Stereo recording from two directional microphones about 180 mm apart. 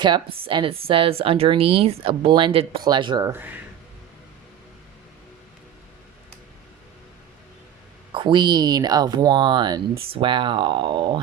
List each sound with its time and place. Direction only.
0.0 s speech: 25° right (ahead or behind)
8.1 s speech: 25° right (ahead or behind)